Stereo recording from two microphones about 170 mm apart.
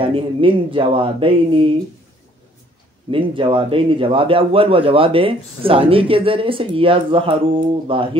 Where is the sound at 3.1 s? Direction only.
30° right (ahead or behind).